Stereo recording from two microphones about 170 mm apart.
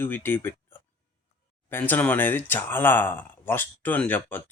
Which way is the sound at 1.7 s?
10° left (ahead or behind).